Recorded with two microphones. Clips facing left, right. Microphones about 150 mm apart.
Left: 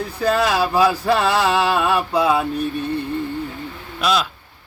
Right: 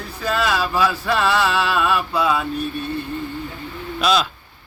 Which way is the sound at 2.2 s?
25° left (ahead or behind).